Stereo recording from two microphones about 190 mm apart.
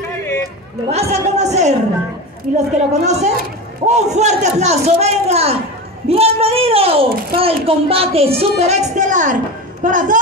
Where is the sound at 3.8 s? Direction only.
35° right (ahead or behind).